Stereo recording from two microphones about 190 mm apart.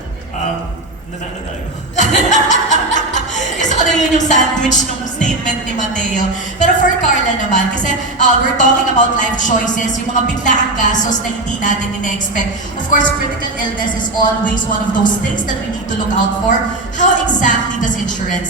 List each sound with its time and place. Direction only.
2.0 s a woman's voice: 40° left (ahead or behind)
17.0 s a woman's voice: 40° left (ahead or behind)